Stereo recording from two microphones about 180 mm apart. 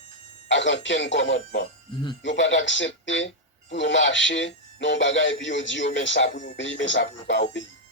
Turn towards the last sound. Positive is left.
turn(degrees=90)